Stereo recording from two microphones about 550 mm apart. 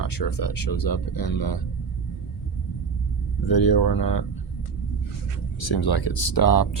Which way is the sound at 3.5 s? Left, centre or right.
Left.